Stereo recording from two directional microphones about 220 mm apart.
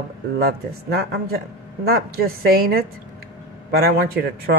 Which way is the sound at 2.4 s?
45° right (ahead or behind).